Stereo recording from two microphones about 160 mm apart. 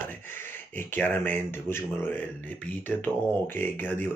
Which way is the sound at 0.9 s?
10° left (ahead or behind).